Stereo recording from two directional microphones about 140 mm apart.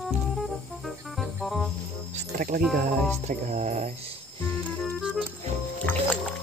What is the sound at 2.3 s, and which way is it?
Speech, 80° right.